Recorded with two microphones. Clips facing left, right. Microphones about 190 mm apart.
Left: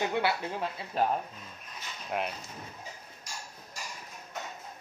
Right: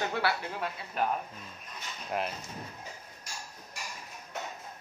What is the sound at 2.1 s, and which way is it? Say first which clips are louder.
Speech: even; centre (ahead or behind).